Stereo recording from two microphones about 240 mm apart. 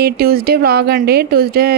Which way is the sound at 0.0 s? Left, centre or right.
Right.